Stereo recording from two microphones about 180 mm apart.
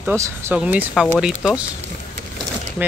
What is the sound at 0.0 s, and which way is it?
Speech, 10° right (ahead or behind).